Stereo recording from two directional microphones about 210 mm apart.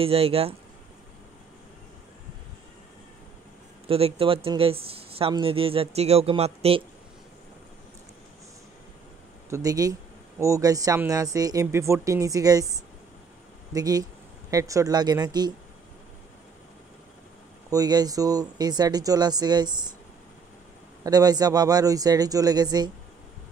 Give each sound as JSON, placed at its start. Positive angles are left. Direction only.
{"t": 0.0, "sound": "speech", "side_deg": -30}
{"t": 3.8, "sound": "speech", "side_deg": -25}
{"t": 9.5, "sound": "speech", "side_deg": -15}
{"t": 17.6, "sound": "speech", "side_deg": -15}
{"t": 21.0, "sound": "speech", "side_deg": -15}